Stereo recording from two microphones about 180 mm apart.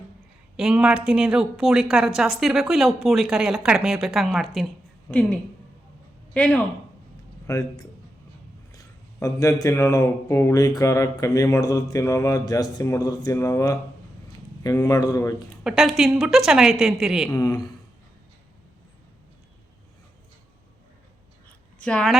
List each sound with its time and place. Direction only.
0.5 s a woman's voice: 5° right (ahead or behind)
7.4 s a man's voice: 20° left (ahead or behind)
15.6 s a woman's voice: centre (ahead or behind)
17.2 s speech: 15° left (ahead or behind)
21.8 s speech: 5° left (ahead or behind)